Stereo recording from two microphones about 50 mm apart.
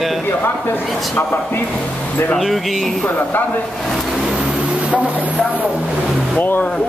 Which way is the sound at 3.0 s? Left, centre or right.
Left.